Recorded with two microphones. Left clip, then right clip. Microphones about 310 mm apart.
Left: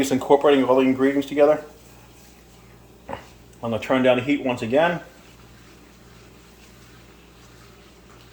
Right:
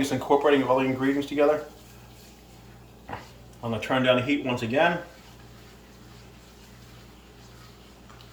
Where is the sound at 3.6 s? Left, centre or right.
Left.